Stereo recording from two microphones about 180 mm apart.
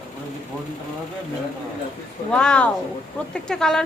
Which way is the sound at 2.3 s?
5° left (ahead or behind).